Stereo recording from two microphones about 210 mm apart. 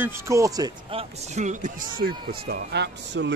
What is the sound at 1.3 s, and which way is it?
Speech, 35° right (ahead or behind).